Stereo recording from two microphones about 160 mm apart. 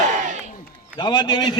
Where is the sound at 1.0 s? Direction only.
25° left (ahead or behind).